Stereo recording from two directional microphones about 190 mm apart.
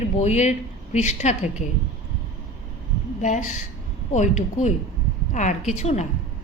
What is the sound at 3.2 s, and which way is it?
A woman's voice, 40° left (ahead or behind).